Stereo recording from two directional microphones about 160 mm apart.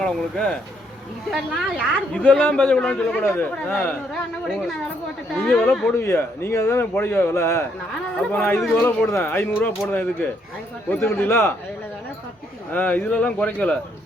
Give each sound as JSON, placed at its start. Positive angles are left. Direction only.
{"t": 0.0, "sound": "speech", "side_deg": 5}
{"t": 2.1, "sound": "a man's voice", "side_deg": 10}
{"t": 4.1, "sound": "speech", "side_deg": 0}
{"t": 6.0, "sound": "a man's voice", "side_deg": 15}
{"t": 12.7, "sound": "a man's voice", "side_deg": 10}